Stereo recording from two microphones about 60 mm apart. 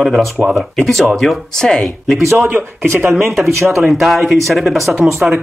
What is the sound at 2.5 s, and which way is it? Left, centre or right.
Speech, right.